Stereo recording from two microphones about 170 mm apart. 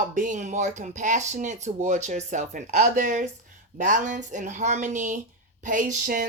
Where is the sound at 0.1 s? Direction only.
50° right (ahead or behind).